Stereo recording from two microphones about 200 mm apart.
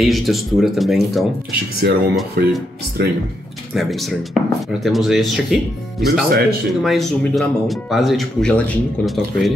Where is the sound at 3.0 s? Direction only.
60° right (ahead or behind).